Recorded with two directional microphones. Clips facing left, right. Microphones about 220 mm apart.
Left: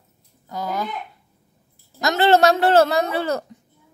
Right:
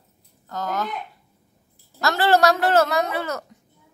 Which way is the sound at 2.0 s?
20° left (ahead or behind).